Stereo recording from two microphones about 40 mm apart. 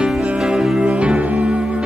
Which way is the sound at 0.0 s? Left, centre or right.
Centre.